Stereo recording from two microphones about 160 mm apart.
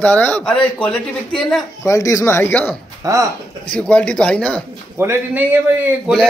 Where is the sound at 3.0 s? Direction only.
20° right (ahead or behind).